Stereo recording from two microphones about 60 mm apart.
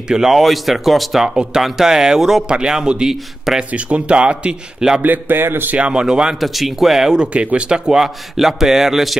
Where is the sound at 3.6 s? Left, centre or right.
Right.